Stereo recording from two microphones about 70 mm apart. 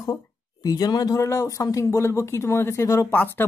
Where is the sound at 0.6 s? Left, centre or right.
Left.